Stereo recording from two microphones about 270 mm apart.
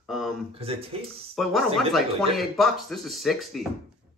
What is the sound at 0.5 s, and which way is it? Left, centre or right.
Speech, right.